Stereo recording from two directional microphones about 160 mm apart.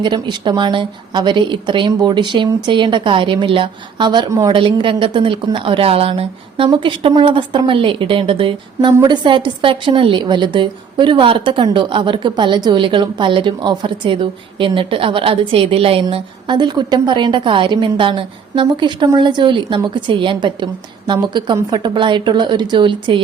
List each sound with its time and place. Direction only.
0.0 s a woman's voice: 30° right (ahead or behind)